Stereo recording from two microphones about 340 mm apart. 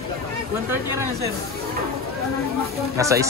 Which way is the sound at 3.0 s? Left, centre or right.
Centre.